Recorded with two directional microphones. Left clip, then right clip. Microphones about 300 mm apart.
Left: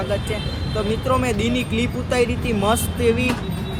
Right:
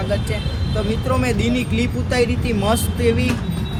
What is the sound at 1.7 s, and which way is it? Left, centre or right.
Speech, centre.